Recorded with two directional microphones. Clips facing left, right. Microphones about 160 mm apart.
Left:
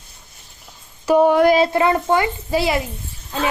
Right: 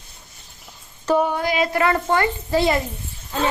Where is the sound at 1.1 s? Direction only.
10° left (ahead or behind).